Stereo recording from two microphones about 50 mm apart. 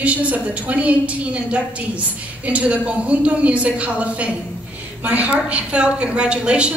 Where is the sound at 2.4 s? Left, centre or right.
Right.